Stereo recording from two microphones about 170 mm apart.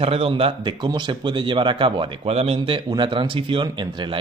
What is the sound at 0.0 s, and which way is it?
A man's voice, 35° right (ahead or behind).